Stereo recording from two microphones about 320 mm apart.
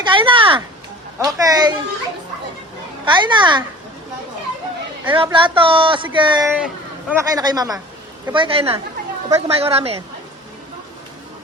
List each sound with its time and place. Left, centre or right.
0.0 s speech: centre
3.1 s speech: centre
5.0 s speech: centre